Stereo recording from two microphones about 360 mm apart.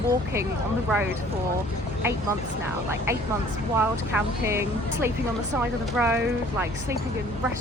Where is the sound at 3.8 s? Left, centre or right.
Centre.